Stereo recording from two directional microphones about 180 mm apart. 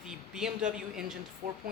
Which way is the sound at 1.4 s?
45° right (ahead or behind).